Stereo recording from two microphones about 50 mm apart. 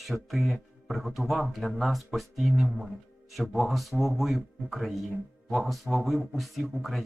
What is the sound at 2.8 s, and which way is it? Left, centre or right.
Music, centre.